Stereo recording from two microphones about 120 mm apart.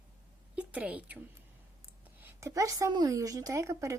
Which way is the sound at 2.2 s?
15° right (ahead or behind).